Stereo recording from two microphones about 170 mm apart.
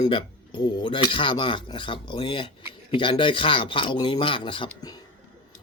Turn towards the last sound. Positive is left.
turn(degrees=30)  # may be behind; listen again after turning